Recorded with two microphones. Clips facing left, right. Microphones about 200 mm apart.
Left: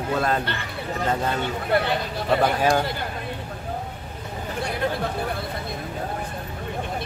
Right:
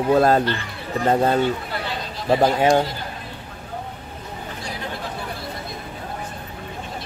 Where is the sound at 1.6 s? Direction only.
60° left (ahead or behind).